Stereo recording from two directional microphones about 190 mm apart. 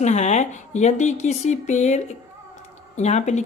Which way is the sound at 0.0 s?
40° left (ahead or behind).